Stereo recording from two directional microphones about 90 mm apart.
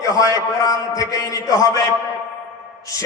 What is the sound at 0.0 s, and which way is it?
A man's voice, 40° left (ahead or behind).